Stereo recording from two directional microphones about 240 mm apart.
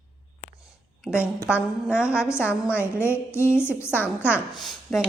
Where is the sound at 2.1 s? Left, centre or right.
Centre.